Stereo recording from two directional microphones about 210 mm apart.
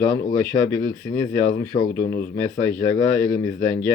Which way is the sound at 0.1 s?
20° left (ahead or behind).